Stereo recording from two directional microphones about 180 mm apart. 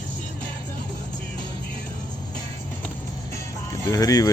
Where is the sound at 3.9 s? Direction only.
20° left (ahead or behind).